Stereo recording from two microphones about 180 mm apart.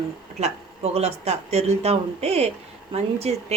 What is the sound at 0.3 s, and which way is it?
Speech, 35° right (ahead or behind).